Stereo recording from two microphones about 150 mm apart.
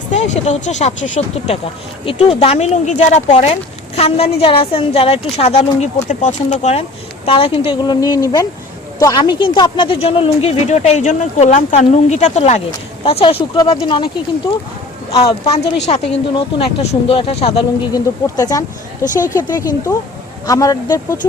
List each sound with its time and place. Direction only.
0.1 s speech: 50° left (ahead or behind)
2.0 s speech: 40° left (ahead or behind)
7.3 s a woman's voice: 35° left (ahead or behind)
13.1 s a woman's voice: 40° left (ahead or behind)
15.1 s speech: 25° left (ahead or behind)
15.4 s a woman's voice: 40° left (ahead or behind)
17.9 s speech: 25° left (ahead or behind)
19.9 s speech: 30° left (ahead or behind)